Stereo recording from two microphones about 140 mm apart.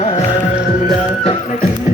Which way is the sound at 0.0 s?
50° left (ahead or behind).